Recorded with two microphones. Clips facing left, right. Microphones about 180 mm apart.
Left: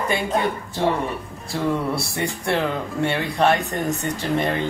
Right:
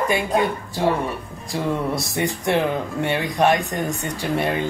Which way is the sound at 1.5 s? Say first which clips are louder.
Even; 20° right (ahead or behind).